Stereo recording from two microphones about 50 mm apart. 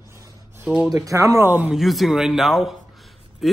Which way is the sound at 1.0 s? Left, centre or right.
Right.